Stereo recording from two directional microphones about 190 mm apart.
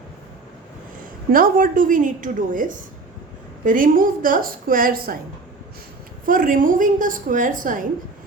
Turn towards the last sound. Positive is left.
turn(degrees=-45)  # may be behind; listen again after turning